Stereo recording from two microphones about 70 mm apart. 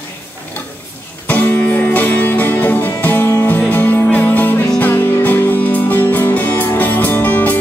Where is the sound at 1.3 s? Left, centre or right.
Left.